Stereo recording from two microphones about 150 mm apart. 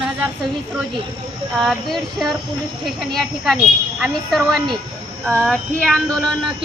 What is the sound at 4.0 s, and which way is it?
Speech, centre (ahead or behind).